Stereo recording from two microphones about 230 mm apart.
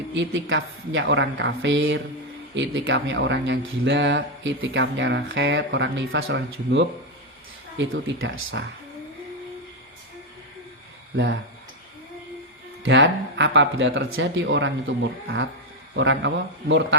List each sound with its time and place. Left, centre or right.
0.1 s speech: right
12.8 s speech: right
16.0 s speech: right